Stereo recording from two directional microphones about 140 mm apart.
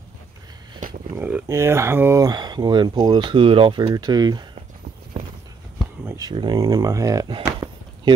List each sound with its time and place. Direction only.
1.1 s speech: 15° right (ahead or behind)
6.1 s speech: 30° right (ahead or behind)
7.4 s a sound: 25° right (ahead or behind)